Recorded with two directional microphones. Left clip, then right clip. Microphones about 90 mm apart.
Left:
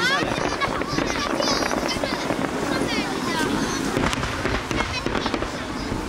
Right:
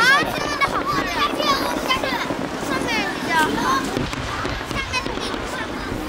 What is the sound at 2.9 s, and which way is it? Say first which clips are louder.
Vehicle: right 4 dB; 35° right (ahead or behind).